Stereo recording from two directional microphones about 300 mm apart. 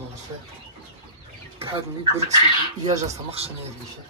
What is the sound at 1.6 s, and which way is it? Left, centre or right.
Speech, centre.